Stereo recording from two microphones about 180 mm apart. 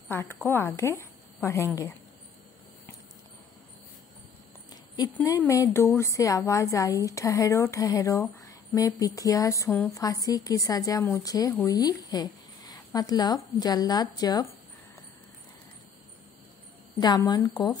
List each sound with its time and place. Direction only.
0.1 s a woman's voice: 10° left (ahead or behind)
5.4 s a woman's voice: 15° left (ahead or behind)
17.0 s a woman's voice: 25° left (ahead or behind)